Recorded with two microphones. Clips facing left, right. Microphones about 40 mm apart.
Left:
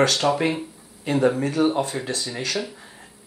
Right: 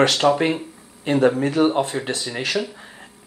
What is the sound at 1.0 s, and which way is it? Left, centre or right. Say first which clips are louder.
Speech: right 3 dB; right.